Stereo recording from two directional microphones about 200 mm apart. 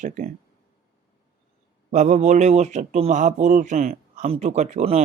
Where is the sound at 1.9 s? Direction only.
35° right (ahead or behind).